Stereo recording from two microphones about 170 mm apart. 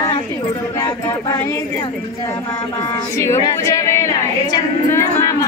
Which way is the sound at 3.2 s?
20° left (ahead or behind).